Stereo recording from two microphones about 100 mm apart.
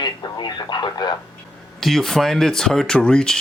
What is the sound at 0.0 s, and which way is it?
Speech, 45° left (ahead or behind).